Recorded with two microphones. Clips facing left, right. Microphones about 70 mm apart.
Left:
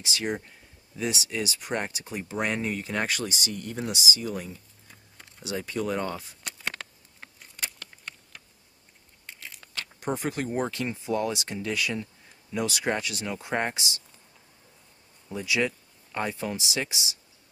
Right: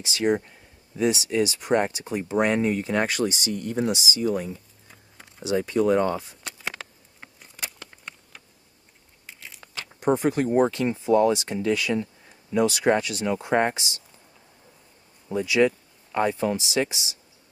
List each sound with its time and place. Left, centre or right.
0.0 s speech: right
6.4 s insect: centre
9.2 s biting: centre
9.8 s speech: right
15.2 s speech: right